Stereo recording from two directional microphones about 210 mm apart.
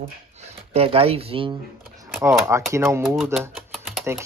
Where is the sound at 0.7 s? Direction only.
30° right (ahead or behind).